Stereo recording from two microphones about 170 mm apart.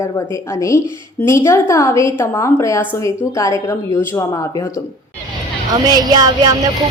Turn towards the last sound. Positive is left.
turn(degrees=-25)  # may be behind; listen again after turning